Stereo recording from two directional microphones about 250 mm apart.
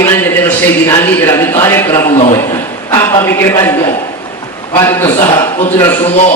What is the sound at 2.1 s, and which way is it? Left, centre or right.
Speech, left.